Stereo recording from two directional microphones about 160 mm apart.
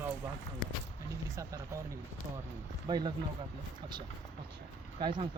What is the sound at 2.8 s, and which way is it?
Speech, 25° right (ahead or behind).